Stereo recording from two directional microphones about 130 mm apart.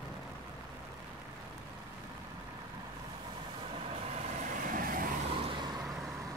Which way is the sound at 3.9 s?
55° right (ahead or behind).